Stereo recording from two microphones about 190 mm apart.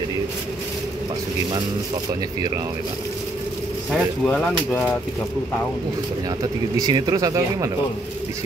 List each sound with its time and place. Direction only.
3.9 s speech: 5° left (ahead or behind)
6.8 s speech: 20° right (ahead or behind)